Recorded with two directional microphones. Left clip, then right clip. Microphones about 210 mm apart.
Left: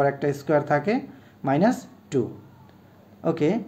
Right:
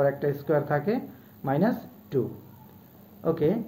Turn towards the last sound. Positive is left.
turn(degrees=40)  # may be behind; listen again after turning